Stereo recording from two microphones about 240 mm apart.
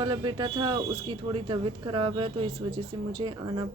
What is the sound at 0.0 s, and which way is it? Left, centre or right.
A woman's voice, centre.